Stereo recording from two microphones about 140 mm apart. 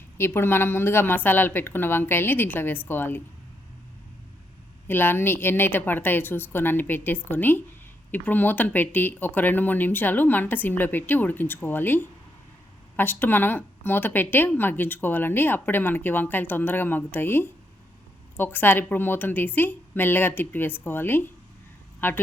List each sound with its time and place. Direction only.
0.2 s speech: 15° left (ahead or behind)
4.9 s speech: 15° left (ahead or behind)